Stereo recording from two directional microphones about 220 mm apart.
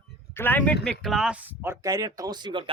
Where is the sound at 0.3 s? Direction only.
10° left (ahead or behind).